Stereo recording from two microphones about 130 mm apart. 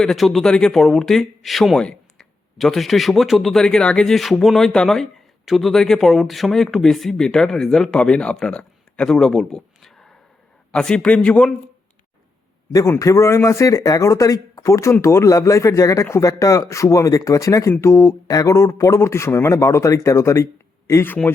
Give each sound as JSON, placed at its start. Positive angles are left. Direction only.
{"t": 0.0, "sound": "a man's voice", "side_deg": 0}
{"t": 12.7, "sound": "speech", "side_deg": 25}